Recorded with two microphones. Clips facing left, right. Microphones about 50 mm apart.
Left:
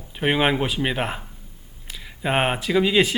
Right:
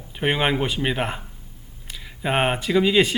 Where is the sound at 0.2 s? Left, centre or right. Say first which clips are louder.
Left 1 dB; centre.